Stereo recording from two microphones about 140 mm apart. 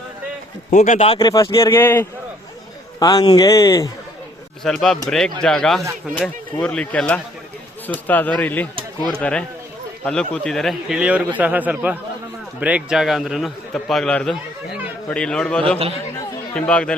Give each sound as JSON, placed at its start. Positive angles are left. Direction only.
{"t": 0.7, "sound": "speech", "side_deg": 60}
{"t": 0.9, "sound": "speech", "side_deg": 45}
{"t": 1.2, "sound": "speech", "side_deg": 25}
{"t": 1.6, "sound": "speech", "side_deg": 15}
{"t": 3.2, "sound": "speech", "side_deg": 35}
{"t": 4.6, "sound": "a man's voice", "side_deg": 5}
{"t": 10.0, "sound": "a man's voice", "side_deg": 5}